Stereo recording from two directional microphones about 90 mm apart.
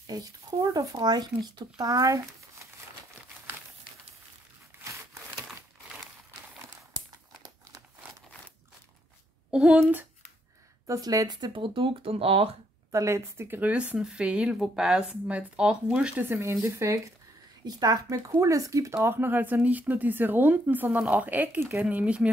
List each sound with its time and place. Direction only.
0.0 s speech: 50° right (ahead or behind)
4.7 s a sound: 25° right (ahead or behind)
9.5 s speech: 10° right (ahead or behind)
10.9 s speech: 40° right (ahead or behind); by 12.4 s 90° right
12.9 s speech: 30° right (ahead or behind); by 16.3 s 15° right (ahead or behind)
16.3 s speech: 30° right (ahead or behind)
17.6 s a woman's voice: 45° right (ahead or behind)
18.0 s speech: 35° right (ahead or behind)
18.9 s speech: 25° right (ahead or behind)
21.8 s speech: 15° right (ahead or behind)